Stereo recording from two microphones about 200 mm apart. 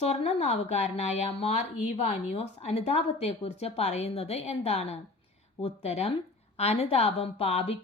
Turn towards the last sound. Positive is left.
turn(degrees=30)  # may be behind; listen again after turning